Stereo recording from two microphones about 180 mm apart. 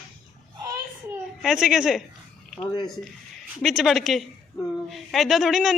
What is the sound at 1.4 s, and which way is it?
Speech, 5° right (ahead or behind).